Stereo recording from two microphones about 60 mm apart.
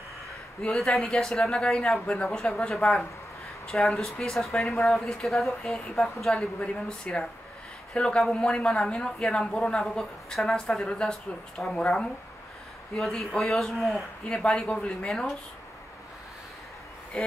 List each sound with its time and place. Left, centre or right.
0.7 s speech: centre
5.2 s speech: centre
6.3 s speech: centre
12.9 s speech: centre
14.2 s speech: centre
15.0 s speech: centre